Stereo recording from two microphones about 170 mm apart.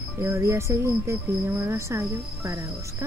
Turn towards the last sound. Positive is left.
turn(degrees=-15)  # may be behind; listen again after turning